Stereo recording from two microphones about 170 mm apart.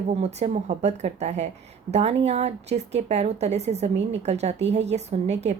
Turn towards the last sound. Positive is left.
turn(degrees=-40)  # may be behind; listen again after turning